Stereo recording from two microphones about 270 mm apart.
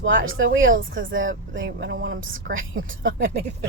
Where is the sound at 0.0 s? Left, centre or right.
Right.